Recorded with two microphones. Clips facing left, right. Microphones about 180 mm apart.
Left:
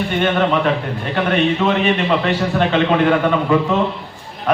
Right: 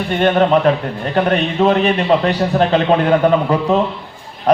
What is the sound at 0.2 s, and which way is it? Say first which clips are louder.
A man's voice: right 5 dB; 35° right (ahead or behind).